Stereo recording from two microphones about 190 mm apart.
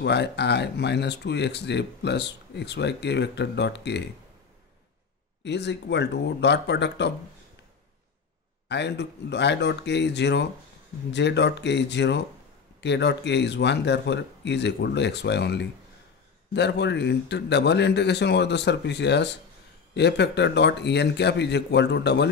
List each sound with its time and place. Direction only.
0.0 s speech: 65° left (ahead or behind)
5.4 s speech: 65° left (ahead or behind)
8.6 s speech: 65° left (ahead or behind)